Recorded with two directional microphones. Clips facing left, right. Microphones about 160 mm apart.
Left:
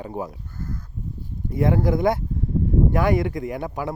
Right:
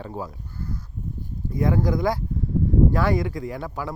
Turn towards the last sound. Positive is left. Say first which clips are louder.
# left 3 dB
turn(degrees=20)  # may be behind; listen again after turning